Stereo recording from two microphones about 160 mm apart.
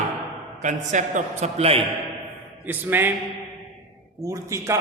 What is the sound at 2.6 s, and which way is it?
Speech, 15° right (ahead or behind).